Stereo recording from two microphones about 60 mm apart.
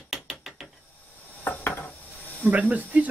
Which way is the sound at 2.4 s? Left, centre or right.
Right.